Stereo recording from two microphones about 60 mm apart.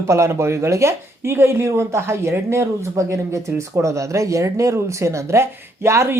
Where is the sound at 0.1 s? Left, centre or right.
Right.